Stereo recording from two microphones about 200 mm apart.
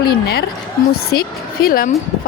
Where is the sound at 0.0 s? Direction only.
50° left (ahead or behind).